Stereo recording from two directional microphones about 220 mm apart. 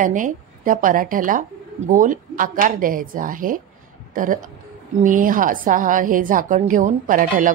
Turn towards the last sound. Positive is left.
turn(degrees=-35)  # may be behind; listen again after turning